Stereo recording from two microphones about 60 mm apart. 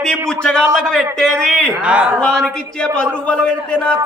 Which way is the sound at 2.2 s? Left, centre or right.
Centre.